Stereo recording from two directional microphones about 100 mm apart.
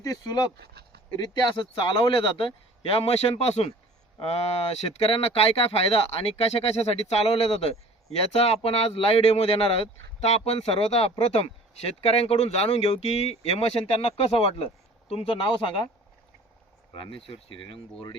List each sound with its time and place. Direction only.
0.0 s speech: 35° left (ahead or behind)
1.1 s speech: 45° left (ahead or behind); by 2.5 s 60° left (ahead or behind)
2.9 s speech: 85° left; by 15.8 s 55° left (ahead or behind)
16.9 s speech: 60° left (ahead or behind)